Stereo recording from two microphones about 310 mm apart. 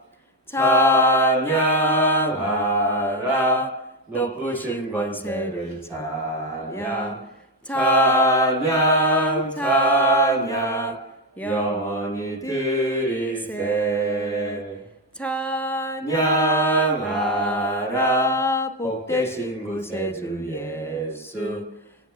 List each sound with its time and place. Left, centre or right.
0.5 s mantra: centre
4.1 s speech: centre
6.7 s mantra: centre
15.2 s a sound: centre